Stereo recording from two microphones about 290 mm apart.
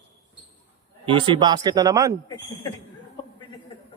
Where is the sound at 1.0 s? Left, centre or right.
Centre.